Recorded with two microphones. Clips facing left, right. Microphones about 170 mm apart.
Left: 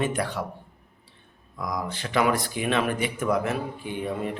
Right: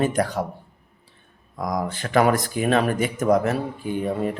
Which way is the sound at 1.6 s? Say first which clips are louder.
Right 5 dB; 45° right (ahead or behind).